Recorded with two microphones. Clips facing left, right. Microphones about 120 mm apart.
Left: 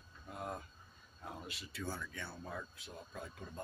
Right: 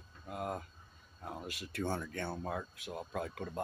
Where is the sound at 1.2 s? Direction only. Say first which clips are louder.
Right 4 dB; 50° right (ahead or behind).